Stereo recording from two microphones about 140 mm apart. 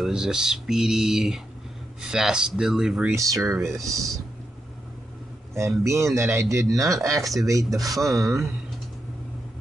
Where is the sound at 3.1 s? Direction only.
20° right (ahead or behind).